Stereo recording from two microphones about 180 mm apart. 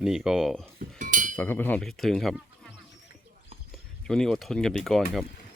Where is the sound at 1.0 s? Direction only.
45° right (ahead or behind).